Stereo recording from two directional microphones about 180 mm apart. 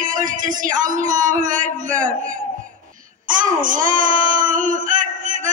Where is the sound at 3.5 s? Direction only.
50° right (ahead or behind).